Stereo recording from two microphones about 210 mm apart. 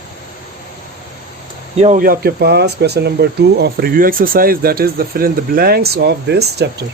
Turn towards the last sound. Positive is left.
turn(degrees=-50)  # may be behind; listen again after turning